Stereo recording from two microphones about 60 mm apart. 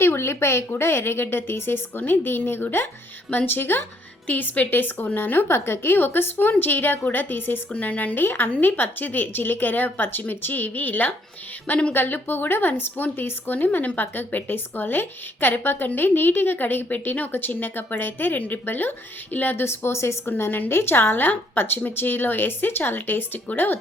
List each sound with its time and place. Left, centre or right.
0.0 s speech: left
20.2 s speech: left